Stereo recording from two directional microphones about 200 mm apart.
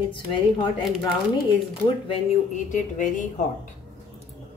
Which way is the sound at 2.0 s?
40° left (ahead or behind).